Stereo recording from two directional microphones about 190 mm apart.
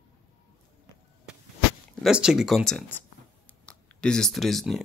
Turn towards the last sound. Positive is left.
turn(degrees=0)  # may be behind; listen again after turning